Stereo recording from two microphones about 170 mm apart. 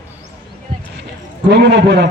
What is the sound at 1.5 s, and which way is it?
Speech, 90° right.